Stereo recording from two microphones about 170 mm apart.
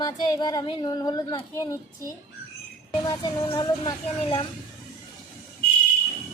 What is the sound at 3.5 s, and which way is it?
Child singing, 25° left (ahead or behind).